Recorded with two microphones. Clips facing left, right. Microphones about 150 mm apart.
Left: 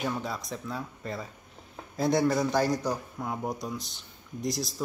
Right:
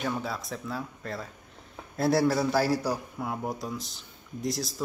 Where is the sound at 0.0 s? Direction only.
Centre (ahead or behind).